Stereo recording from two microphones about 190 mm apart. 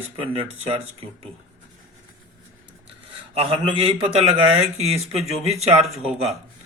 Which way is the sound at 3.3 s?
30° right (ahead or behind).